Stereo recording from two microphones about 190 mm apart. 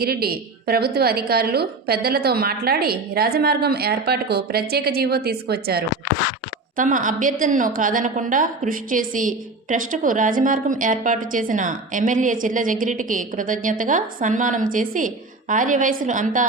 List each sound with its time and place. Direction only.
0.0 s a woman's voice: 55° right (ahead or behind)
6.7 s a woman's voice: 40° right (ahead or behind)